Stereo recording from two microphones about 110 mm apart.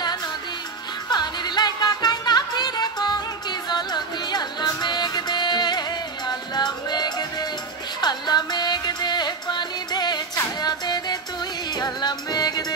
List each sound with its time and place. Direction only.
1.1 s music: 40° left (ahead or behind)